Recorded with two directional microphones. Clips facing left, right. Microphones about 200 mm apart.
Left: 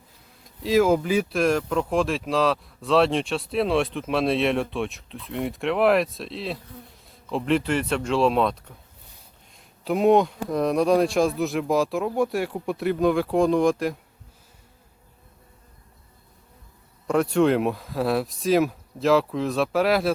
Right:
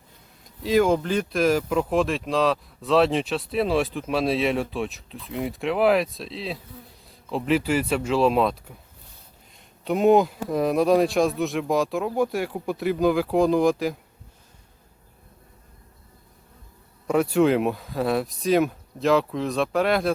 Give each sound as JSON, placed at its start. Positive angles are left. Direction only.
{"t": 0.4, "sound": "speech", "side_deg": 0}
{"t": 17.1, "sound": "speech", "side_deg": -5}